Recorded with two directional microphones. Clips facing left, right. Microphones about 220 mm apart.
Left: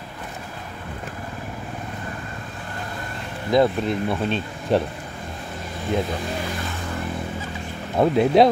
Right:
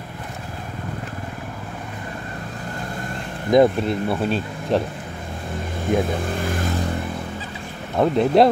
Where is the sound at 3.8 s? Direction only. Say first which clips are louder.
Right 1 dB; 5° right (ahead or behind).